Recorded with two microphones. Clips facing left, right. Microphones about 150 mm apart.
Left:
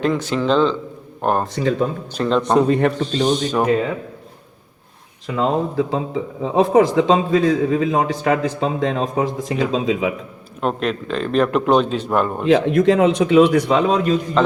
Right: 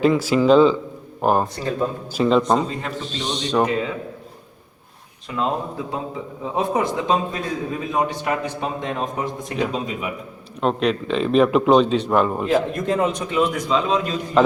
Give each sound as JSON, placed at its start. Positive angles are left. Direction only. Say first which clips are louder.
{"t": 0.0, "sound": "speech", "louder": "right 3 dB", "side_deg": -5}
{"t": 2.6, "sound": "a man's voice", "louder": "left 10 dB", "side_deg": 65}
{"t": 2.9, "sound": "speech", "louder": "left 9 dB", "side_deg": 0}
{"t": 5.4, "sound": "a man's voice", "louder": "left 5 dB", "side_deg": 90}
{"t": 10.6, "sound": "speech", "louder": "right 1 dB", "side_deg": 0}
{"t": 12.5, "sound": "a man's voice", "louder": "left 6 dB", "side_deg": 90}
{"t": 14.4, "sound": "speech", "louder": "right 2 dB", "side_deg": -5}